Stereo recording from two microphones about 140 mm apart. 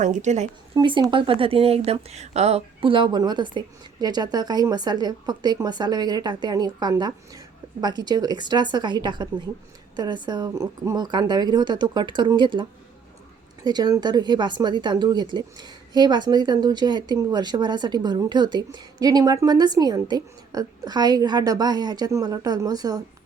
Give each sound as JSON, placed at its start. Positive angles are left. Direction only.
{"t": 0.0, "sound": "a woman's voice", "side_deg": -60}
{"t": 0.8, "sound": "speech", "side_deg": -35}
{"t": 13.7, "sound": "speech", "side_deg": -30}